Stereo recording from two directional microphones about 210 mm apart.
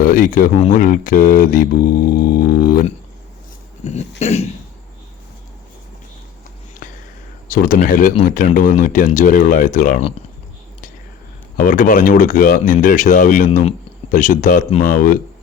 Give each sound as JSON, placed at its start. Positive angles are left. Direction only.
{"t": 0.0, "sound": "speech", "side_deg": 40}
{"t": 3.8, "sound": "speech", "side_deg": 30}
{"t": 7.4, "sound": "speech", "side_deg": 40}
{"t": 11.5, "sound": "speech", "side_deg": 40}